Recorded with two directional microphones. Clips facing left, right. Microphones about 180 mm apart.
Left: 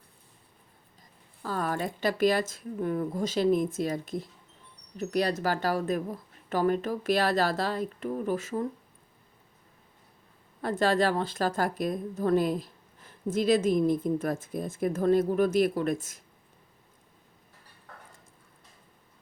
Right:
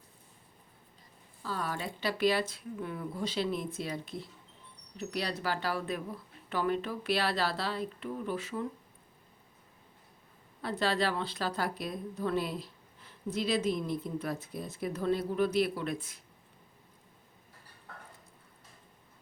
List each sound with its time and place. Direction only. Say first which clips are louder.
1.4 s a woman's voice: left 6 dB; 50° left (ahead or behind)
10.6 s a woman's voice: left 6 dB; 45° left (ahead or behind)